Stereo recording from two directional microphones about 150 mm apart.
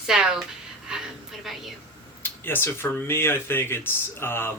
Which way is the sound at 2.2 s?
15° left (ahead or behind).